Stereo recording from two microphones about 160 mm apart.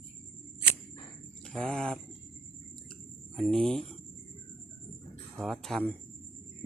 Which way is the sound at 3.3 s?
5° left (ahead or behind).